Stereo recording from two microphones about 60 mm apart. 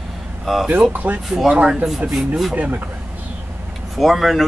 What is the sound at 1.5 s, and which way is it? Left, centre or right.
Speech, centre.